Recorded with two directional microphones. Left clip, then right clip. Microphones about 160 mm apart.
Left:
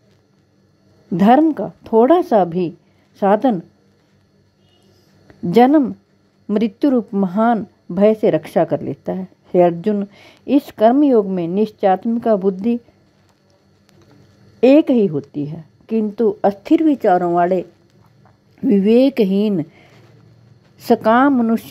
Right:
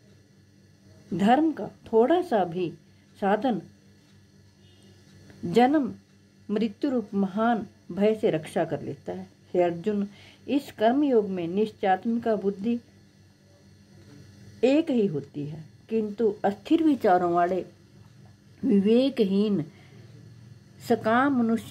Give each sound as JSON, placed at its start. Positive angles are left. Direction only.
{"t": 1.1, "sound": "speech", "side_deg": 30}
{"t": 5.5, "sound": "speech", "side_deg": 30}
{"t": 14.6, "sound": "speech", "side_deg": 35}
{"t": 16.8, "sound": "speech", "side_deg": 5}
{"t": 20.8, "sound": "speech", "side_deg": 30}